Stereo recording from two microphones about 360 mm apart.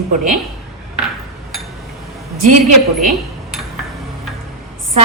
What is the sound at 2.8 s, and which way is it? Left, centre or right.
Dishes, centre.